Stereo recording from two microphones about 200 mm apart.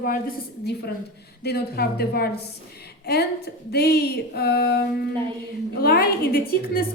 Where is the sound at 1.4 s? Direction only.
50° left (ahead or behind).